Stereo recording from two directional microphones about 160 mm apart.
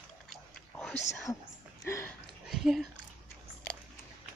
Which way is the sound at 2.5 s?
Centre (ahead or behind).